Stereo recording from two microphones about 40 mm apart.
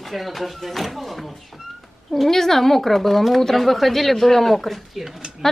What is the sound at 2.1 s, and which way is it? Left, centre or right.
Speech, centre.